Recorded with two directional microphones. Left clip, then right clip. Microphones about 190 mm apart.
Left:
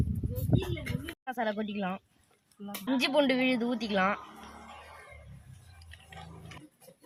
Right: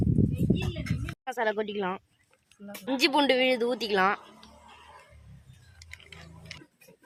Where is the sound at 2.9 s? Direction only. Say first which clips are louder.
Right 4 dB; 75° right (ahead or behind).